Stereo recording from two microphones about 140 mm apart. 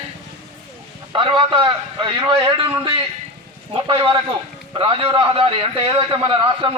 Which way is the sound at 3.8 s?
35° right (ahead or behind).